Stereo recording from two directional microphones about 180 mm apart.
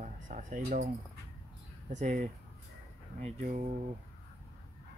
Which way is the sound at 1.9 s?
40° right (ahead or behind).